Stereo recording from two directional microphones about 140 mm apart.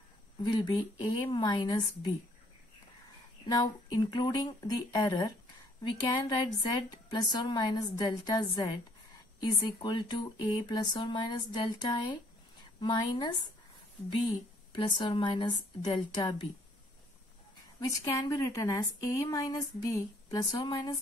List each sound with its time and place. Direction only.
0.4 s speech: 30° left (ahead or behind)
3.4 s a woman's voice: 30° left (ahead or behind)
14.8 s speech: 35° left (ahead or behind)
17.7 s a woman's voice: 25° left (ahead or behind)